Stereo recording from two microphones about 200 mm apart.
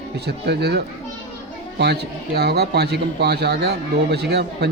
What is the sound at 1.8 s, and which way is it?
Speech, 55° right (ahead or behind).